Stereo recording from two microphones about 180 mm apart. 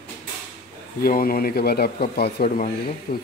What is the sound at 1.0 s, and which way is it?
Speech, 55° left (ahead or behind).